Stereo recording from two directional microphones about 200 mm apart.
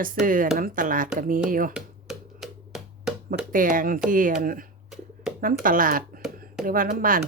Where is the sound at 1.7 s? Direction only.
5° right (ahead or behind).